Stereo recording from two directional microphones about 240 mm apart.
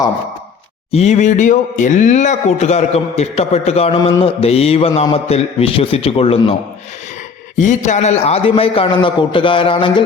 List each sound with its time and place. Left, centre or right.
0.9 s speech: left
7.5 s speech: left